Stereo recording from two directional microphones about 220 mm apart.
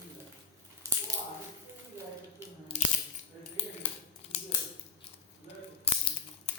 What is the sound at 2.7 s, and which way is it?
Scissors, 30° left (ahead or behind).